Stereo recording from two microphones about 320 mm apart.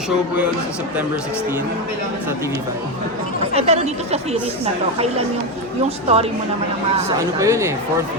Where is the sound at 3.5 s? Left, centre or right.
Centre.